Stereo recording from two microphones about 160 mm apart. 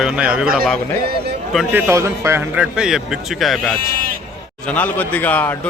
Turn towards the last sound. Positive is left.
turn(degrees=10)  # may be behind; listen again after turning